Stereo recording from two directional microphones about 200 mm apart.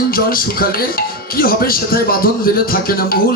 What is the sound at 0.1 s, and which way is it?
Speech, 45° left (ahead or behind).